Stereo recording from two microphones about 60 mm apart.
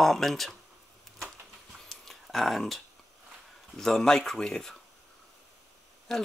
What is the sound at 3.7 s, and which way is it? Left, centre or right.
Speech, centre.